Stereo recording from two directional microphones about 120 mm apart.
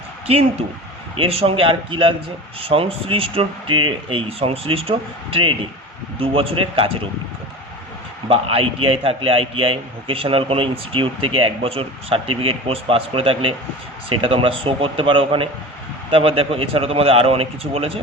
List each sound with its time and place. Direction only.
0.3 s a man's voice: 55° right (ahead or behind)
8.3 s a man's voice: 50° right (ahead or behind)